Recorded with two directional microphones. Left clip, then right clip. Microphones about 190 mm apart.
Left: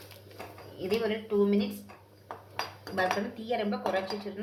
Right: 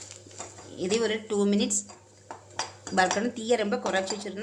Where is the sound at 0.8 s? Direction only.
45° right (ahead or behind).